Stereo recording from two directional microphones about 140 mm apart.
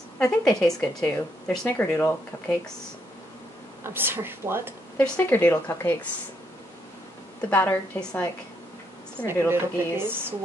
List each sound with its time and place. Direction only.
0.2 s speech: 5° left (ahead or behind)
3.8 s speech: 15° right (ahead or behind)
4.9 s speech: 10° left (ahead or behind)
7.4 s speech: 15° left (ahead or behind)
9.5 s speech: 15° right (ahead or behind)